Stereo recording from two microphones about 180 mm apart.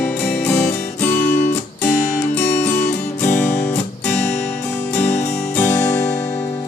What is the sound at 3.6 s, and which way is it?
Music, 10° left (ahead or behind).